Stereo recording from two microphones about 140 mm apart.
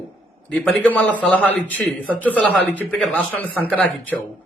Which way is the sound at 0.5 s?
10° left (ahead or behind).